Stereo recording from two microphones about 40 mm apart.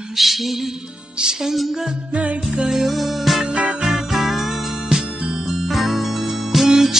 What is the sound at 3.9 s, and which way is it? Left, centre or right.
Music, centre.